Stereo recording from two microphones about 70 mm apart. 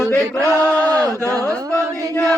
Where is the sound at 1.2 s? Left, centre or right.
Right.